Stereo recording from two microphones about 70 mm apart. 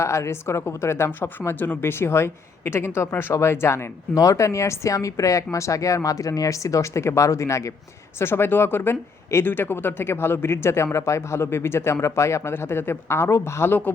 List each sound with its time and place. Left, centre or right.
0.0 s speech: left
1.5 s speech: left
4.1 s speech: left
8.2 s speech: left